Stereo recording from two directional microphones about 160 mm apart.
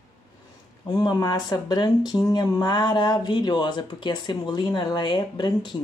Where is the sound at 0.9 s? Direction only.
25° left (ahead or behind).